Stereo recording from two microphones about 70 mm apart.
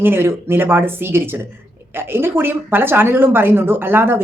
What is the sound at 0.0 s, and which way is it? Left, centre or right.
Speech, right.